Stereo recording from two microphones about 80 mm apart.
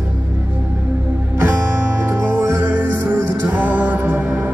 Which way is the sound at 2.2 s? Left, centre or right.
Right.